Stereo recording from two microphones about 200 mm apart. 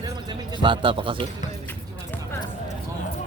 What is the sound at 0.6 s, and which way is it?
Speech, 25° right (ahead or behind).